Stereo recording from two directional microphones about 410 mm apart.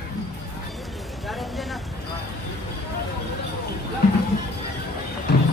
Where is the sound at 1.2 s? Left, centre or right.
Centre.